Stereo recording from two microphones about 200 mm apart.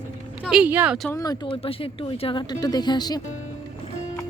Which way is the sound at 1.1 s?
20° left (ahead or behind).